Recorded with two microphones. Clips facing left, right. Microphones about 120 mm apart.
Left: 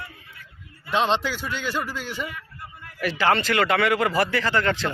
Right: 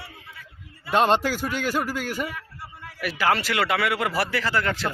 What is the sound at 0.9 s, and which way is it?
Speech, 45° right (ahead or behind).